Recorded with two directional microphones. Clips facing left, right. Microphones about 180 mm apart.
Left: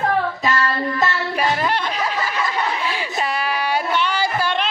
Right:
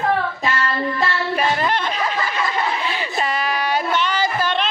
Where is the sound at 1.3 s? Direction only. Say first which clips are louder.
Right 1 dB; 10° left (ahead or behind).